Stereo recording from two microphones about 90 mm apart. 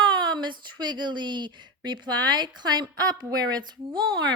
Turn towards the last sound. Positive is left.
turn(degrees=-55)  # may be behind; listen again after turning